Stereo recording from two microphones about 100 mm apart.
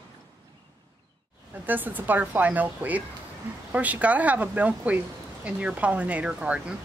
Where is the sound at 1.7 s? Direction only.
20° right (ahead or behind).